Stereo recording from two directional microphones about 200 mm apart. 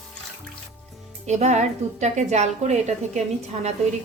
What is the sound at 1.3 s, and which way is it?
A woman's voice, 35° right (ahead or behind).